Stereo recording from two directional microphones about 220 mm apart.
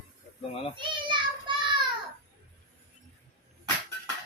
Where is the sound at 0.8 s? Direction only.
20° right (ahead or behind).